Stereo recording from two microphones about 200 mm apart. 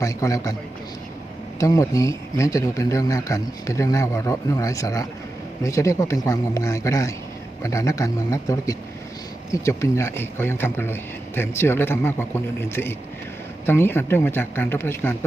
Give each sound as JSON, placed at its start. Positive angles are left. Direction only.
{"t": 0.0, "sound": "speech", "side_deg": 15}
{"t": 1.5, "sound": "speech", "side_deg": 15}